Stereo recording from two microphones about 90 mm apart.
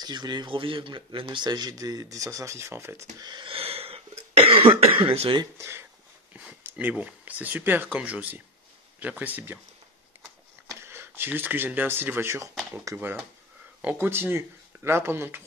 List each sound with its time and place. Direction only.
0.0 s speech: 55° right (ahead or behind); by 3.1 s 25° right (ahead or behind)
3.2 s speech: 50° right (ahead or behind)
3.4 s cough: 90° right; by 5.4 s 75° right (ahead or behind)
5.6 s speech: 30° right (ahead or behind)
6.3 s speech: 15° right (ahead or behind)
10.7 s speech: 30° right (ahead or behind)